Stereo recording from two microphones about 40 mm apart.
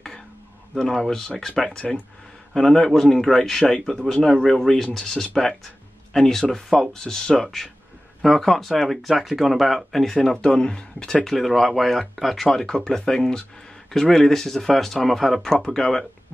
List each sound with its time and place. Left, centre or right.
0.7 s speech: centre
7.4 s speech: centre
10.2 s speech: centre
11.2 s speech: centre
13.9 s speech: centre